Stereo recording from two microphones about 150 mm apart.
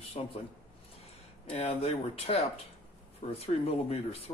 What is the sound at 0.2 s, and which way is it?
Speech, 35° left (ahead or behind).